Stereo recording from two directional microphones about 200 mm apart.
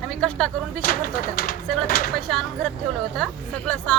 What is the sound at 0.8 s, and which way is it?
Speech, 45° left (ahead or behind).